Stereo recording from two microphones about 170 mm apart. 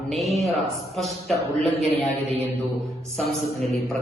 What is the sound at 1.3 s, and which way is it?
Speech, 35° right (ahead or behind).